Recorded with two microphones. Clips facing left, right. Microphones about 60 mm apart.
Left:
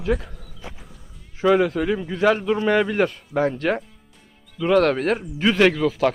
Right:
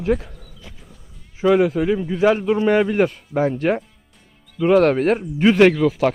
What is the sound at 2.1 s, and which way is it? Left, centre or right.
Speech, centre.